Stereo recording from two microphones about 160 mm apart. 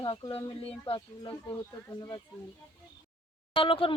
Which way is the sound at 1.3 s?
20° left (ahead or behind).